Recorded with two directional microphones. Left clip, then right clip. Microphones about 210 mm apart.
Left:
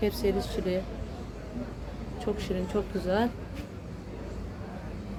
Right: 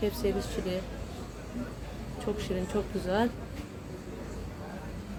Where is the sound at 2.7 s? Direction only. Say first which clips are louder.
Left 2 dB; 5° left (ahead or behind).